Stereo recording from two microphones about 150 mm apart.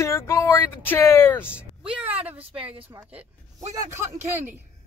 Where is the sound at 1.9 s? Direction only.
10° right (ahead or behind).